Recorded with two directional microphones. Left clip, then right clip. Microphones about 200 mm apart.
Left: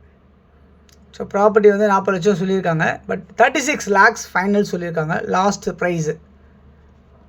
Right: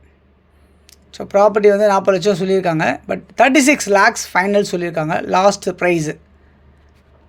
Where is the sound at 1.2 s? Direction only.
45° right (ahead or behind).